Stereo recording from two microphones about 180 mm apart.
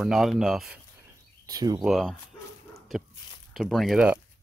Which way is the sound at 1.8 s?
Centre (ahead or behind).